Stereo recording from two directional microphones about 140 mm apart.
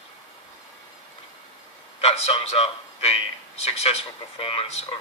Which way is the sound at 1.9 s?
50° left (ahead or behind).